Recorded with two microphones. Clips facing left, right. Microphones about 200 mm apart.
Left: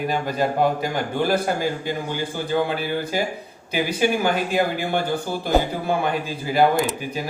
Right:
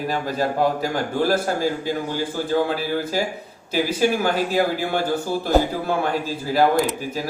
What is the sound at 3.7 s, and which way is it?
Speech, centre (ahead or behind).